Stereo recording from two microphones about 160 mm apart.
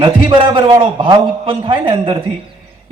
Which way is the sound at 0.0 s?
30° right (ahead or behind).